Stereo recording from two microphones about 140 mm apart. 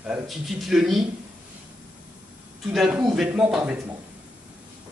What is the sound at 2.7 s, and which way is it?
Speech, 5° right (ahead or behind).